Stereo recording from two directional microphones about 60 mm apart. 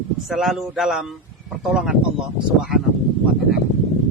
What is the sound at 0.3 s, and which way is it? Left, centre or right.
Speech, centre.